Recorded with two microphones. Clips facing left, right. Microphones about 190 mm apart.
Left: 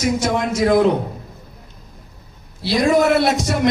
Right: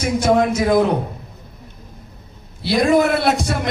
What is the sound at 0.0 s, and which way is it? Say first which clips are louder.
Speech: right 3 dB; 55° right (ahead or behind).